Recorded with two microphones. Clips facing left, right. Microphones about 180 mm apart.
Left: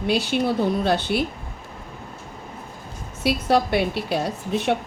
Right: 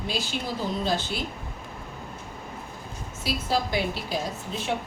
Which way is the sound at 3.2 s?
65° left (ahead or behind).